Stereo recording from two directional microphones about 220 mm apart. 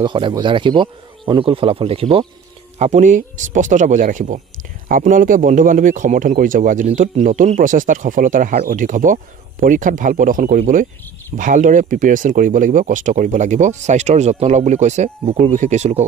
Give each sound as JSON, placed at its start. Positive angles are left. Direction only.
{"t": 0.0, "sound": "speech", "side_deg": -20}